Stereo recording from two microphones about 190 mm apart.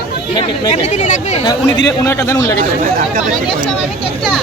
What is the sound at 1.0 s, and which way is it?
Speech, 40° left (ahead or behind).